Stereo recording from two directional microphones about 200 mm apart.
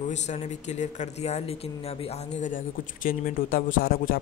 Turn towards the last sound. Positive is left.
turn(degrees=45)  # may be behind; listen again after turning